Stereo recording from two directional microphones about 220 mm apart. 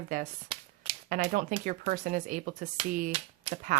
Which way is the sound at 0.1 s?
35° right (ahead or behind).